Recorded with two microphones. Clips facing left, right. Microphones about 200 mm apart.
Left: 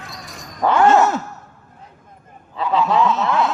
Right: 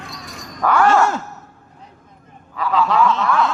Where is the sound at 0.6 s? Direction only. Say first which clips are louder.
Left 1 dB; 25° left (ahead or behind).